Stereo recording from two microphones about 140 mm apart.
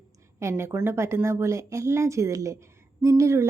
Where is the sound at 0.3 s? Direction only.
20° right (ahead or behind).